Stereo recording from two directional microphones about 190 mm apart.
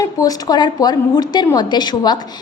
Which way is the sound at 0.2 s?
20° left (ahead or behind).